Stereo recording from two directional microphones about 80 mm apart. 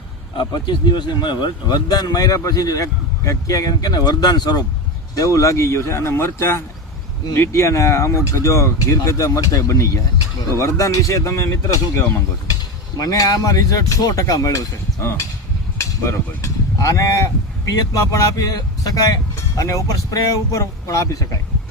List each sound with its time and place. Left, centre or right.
0.3 s speech: left
5.1 s speech: left
13.0 s speech: left